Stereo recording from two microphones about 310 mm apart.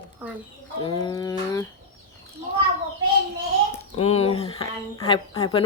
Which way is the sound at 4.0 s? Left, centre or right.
Centre.